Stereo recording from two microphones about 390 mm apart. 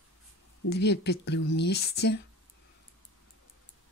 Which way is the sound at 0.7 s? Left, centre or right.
Left.